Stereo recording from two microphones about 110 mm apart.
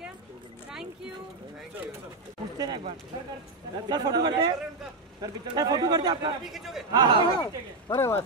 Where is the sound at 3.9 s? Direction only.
40° right (ahead or behind).